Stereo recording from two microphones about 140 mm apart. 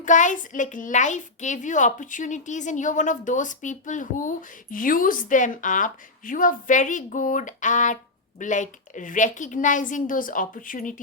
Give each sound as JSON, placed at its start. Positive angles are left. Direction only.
{"t": 0.0, "sound": "a child's voice", "side_deg": 65}